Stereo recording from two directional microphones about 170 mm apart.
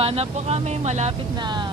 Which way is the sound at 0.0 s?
35° right (ahead or behind).